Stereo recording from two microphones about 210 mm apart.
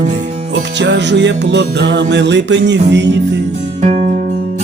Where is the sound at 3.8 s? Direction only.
35° right (ahead or behind).